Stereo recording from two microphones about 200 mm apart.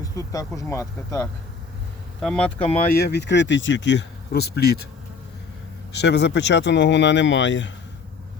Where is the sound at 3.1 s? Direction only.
60° left (ahead or behind).